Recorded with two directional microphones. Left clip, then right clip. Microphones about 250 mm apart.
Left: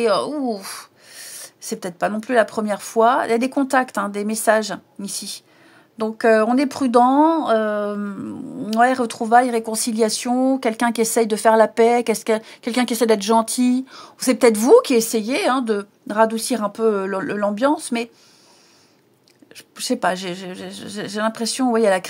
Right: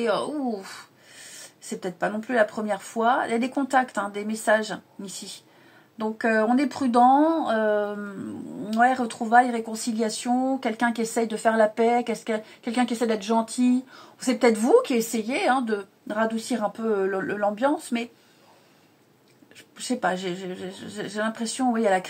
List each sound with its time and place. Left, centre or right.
0.0 s speech: left
19.5 s speech: left